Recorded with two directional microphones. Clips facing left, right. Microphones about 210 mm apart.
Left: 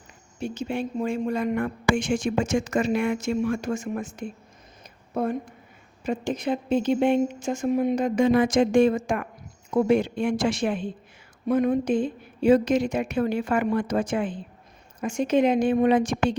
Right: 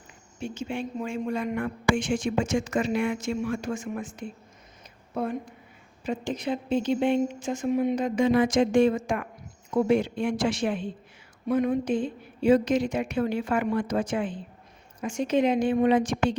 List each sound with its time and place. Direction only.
0.3 s speech: 40° left (ahead or behind)
6.1 s speech: 50° left (ahead or behind)